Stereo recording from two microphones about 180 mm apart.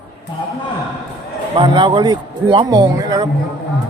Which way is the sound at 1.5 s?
25° right (ahead or behind).